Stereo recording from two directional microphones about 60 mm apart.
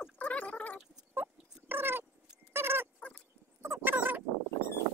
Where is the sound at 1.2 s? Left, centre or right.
Right.